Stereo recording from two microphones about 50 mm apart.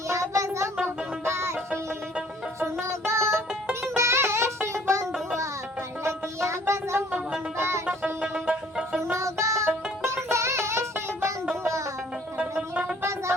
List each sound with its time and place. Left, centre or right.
0.1 s child singing: right
0.9 s music: right
2.6 s music: right
8.4 s music: centre
9.1 s music: right
9.6 s music: right
11.6 s music: right
12.4 s music: right
13.0 s child singing: right